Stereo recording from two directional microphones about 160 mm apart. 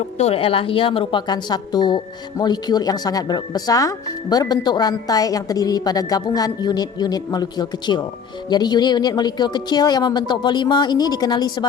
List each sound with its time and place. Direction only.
0.2 s speech: 35° left (ahead or behind)